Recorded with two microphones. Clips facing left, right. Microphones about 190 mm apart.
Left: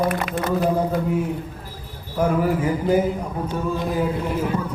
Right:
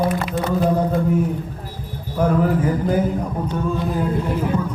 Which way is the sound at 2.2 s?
5° left (ahead or behind).